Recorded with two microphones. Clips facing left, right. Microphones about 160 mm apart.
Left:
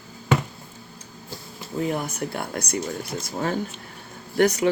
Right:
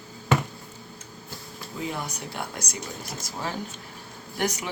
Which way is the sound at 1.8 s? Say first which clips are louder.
Left 7 dB; 55° left (ahead or behind).